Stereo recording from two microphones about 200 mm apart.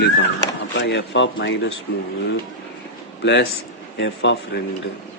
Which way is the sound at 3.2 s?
60° left (ahead or behind).